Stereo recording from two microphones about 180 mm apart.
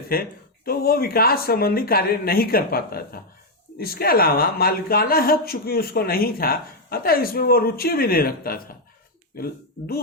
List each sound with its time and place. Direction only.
0.1 s a woman's voice: 55° left (ahead or behind)